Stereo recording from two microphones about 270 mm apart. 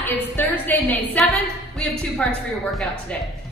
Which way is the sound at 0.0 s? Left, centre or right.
Centre.